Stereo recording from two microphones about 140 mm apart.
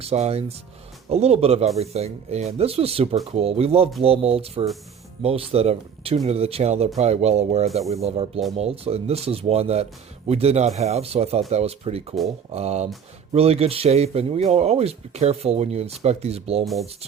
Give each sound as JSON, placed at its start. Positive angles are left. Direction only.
{"t": 0.0, "sound": "speech", "side_deg": -50}